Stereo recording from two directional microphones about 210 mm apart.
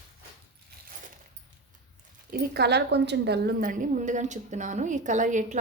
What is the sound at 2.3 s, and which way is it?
A woman's voice, 50° right (ahead or behind).